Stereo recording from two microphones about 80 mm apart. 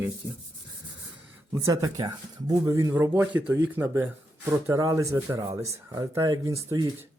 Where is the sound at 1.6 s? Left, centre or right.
Right.